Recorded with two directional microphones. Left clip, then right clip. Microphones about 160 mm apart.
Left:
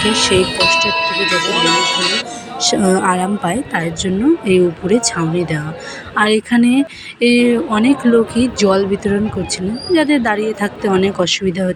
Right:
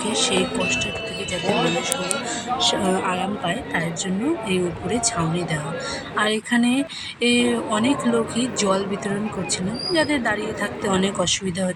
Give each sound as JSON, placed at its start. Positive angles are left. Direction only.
{"t": 0.1, "sound": "speech", "side_deg": 25}
{"t": 1.2, "sound": "speech", "side_deg": 70}
{"t": 2.6, "sound": "speech", "side_deg": 35}